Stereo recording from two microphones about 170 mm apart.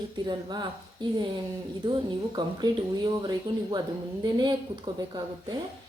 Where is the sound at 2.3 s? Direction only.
25° right (ahead or behind).